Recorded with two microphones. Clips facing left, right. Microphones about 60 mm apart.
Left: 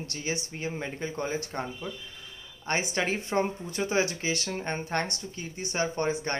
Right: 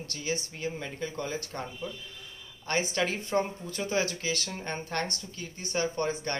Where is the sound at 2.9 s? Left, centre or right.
Left.